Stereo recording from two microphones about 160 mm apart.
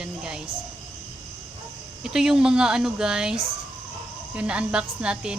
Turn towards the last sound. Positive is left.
turn(degrees=-5)  # may be behind; listen again after turning